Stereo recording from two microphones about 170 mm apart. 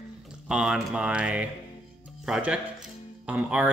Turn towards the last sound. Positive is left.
turn(degrees=-5)  # may be behind; listen again after turning